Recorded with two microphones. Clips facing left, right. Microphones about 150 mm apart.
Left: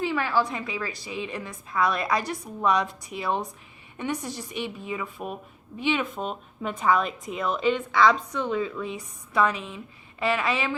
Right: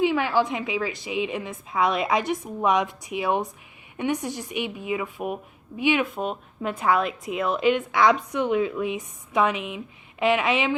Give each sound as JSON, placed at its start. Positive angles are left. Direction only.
{"t": 0.0, "sound": "a woman's voice", "side_deg": -15}